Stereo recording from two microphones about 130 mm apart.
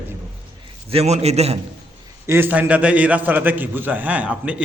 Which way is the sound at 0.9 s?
55° right (ahead or behind).